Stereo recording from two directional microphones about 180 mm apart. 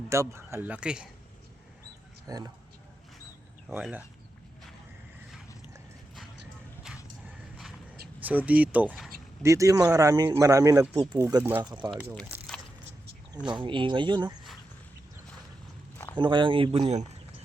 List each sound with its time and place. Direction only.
0.1 s speech: 15° right (ahead or behind)
2.2 s speech: 20° right (ahead or behind)
3.7 s speech: 5° right (ahead or behind)
8.2 s speech: 10° right (ahead or behind)
9.4 s speech: 15° right (ahead or behind)
13.5 s speech: 25° right (ahead or behind)
16.1 s speech: 25° right (ahead or behind)